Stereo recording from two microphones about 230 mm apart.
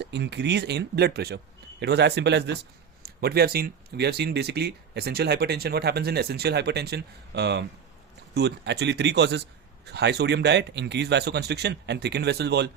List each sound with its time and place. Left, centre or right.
0.0 s speech: right